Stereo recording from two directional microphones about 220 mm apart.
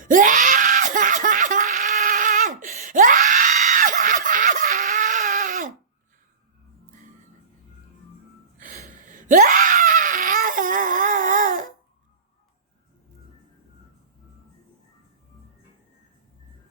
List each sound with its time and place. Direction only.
0.0 s screaming: 35° right (ahead or behind)
8.5 s a sound: 40° right (ahead or behind)
8.9 s crying: 35° right (ahead or behind)